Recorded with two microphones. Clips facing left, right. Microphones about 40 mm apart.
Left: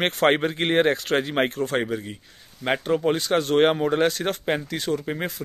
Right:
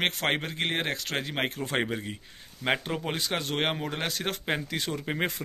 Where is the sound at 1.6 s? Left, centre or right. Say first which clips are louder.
Left 5 dB; centre.